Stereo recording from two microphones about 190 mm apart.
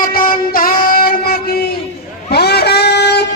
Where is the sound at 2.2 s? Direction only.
60° left (ahead or behind).